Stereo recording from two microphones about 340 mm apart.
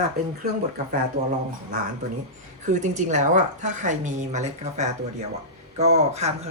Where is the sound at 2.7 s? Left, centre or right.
Right.